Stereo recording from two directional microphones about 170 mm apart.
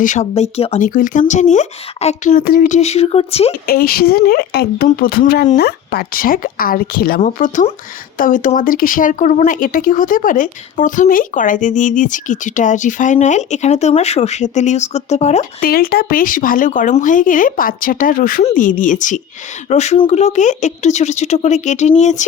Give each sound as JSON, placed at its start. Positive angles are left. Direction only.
{"t": 0.0, "sound": "speech", "side_deg": 45}
{"t": 0.9, "sound": "speech", "side_deg": 50}
{"t": 3.5, "sound": "speech", "side_deg": 60}
{"t": 7.2, "sound": "speech", "side_deg": 50}
{"t": 15.6, "sound": "speech", "side_deg": 60}